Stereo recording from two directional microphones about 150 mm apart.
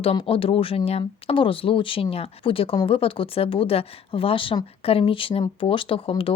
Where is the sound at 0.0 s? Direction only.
40° left (ahead or behind).